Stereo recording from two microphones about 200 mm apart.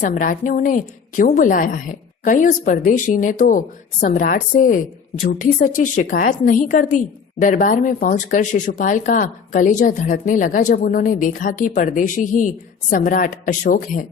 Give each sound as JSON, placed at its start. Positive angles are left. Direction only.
{"t": 0.0, "sound": "a woman's voice", "side_deg": 40}